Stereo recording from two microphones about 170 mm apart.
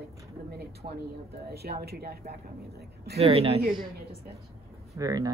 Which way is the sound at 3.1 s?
35° right (ahead or behind).